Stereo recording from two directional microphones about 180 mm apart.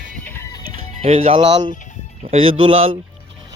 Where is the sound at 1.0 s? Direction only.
30° right (ahead or behind).